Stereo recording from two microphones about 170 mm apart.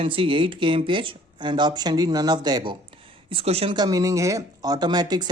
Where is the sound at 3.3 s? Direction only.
35° right (ahead or behind).